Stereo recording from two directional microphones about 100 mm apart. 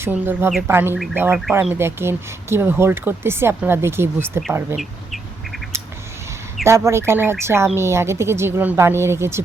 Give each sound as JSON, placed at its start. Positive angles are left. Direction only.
{"t": 0.0, "sound": "speech", "side_deg": -20}
{"t": 4.8, "sound": "bird", "side_deg": 0}
{"t": 6.7, "sound": "speech", "side_deg": -30}